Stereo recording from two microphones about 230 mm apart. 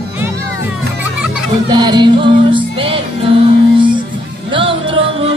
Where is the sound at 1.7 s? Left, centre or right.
Centre.